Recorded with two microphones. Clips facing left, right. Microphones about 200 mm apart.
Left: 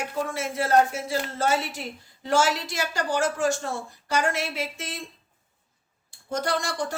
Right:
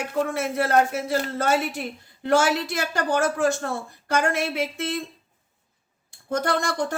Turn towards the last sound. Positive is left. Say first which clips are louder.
# right 3 dB
turn(degrees=-55)  # may be behind; listen again after turning